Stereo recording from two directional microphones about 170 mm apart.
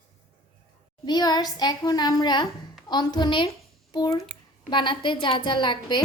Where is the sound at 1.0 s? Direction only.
25° left (ahead or behind).